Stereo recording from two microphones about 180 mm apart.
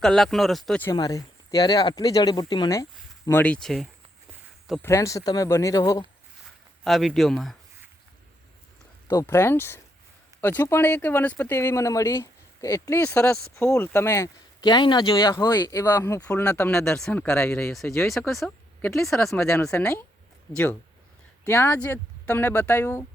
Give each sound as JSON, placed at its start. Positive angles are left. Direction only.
{"t": 0.0, "sound": "speech", "side_deg": 0}
{"t": 0.9, "sound": "speech", "side_deg": 20}
{"t": 3.2, "sound": "speech", "side_deg": 10}
{"t": 4.8, "sound": "speech", "side_deg": 15}
{"t": 6.8, "sound": "speech", "side_deg": 0}
{"t": 9.0, "sound": "speech", "side_deg": 15}
{"t": 18.0, "sound": "speech", "side_deg": 0}
{"t": 21.4, "sound": "speech", "side_deg": 15}